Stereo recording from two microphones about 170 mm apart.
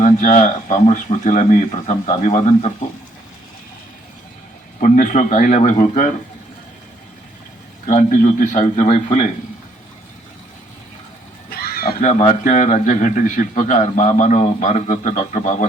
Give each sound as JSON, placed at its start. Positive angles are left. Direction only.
{"t": 0.0, "sound": "speech", "side_deg": 45}
{"t": 4.8, "sound": "speech", "side_deg": 50}
{"t": 7.9, "sound": "speech", "side_deg": 50}
{"t": 11.5, "sound": "speech", "side_deg": 65}